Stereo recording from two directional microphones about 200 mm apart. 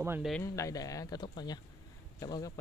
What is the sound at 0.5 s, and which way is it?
Speech, 15° left (ahead or behind).